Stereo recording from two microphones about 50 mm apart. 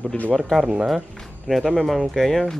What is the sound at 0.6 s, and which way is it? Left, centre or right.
Speech, centre.